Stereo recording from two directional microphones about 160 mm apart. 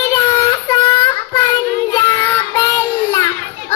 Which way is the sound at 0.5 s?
25° left (ahead or behind).